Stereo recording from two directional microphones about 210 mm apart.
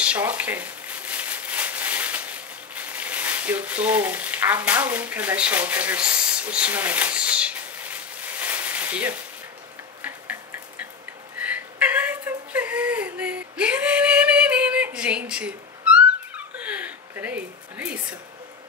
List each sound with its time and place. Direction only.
0.0 s a sound: 5° right (ahead or behind)
10.0 s tick-tock: 5° right (ahead or behind)
11.3 s whimper: 5° right (ahead or behind)